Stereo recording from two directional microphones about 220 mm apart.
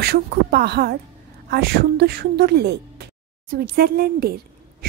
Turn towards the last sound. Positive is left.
turn(degrees=-45)  # may be behind; listen again after turning